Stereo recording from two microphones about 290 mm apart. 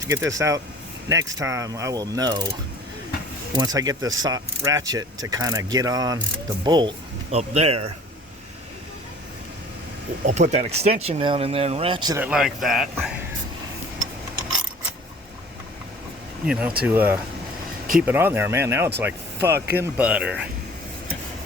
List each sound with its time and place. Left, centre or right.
0.1 s a man's voice: centre
10.2 s a man's voice: right; by 13.1 s centre
16.5 s a man's voice: centre